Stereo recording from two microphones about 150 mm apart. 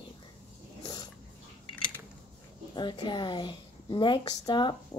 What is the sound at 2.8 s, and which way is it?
A woman's voice, 30° left (ahead or behind).